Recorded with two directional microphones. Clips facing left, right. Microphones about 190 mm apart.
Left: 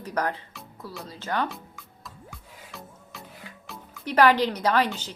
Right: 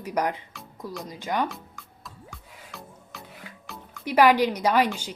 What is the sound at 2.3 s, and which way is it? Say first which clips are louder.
Music: even; centre (ahead or behind).